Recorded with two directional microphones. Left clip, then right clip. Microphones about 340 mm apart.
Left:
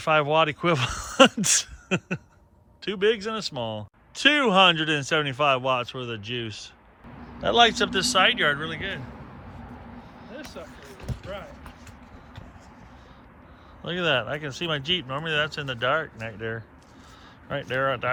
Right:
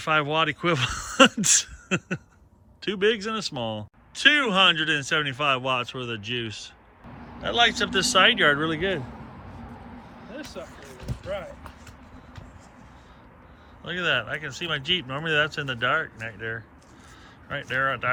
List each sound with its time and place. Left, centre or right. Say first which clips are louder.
0.0 s speech: left 2 dB; centre
10.2 s a sound: right 2 dB; right
13.8 s speech: left 1 dB; centre